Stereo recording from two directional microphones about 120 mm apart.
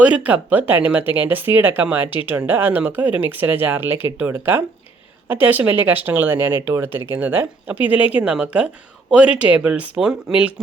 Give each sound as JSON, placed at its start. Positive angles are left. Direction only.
{"t": 0.0, "sound": "speech", "side_deg": -10}